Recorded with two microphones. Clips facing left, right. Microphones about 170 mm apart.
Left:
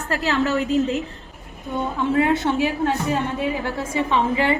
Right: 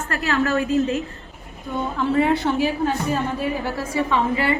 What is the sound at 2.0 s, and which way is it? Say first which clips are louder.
Speech: even; 20° left (ahead or behind).